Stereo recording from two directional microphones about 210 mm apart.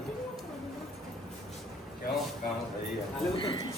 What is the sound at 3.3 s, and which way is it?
Speech, 25° left (ahead or behind).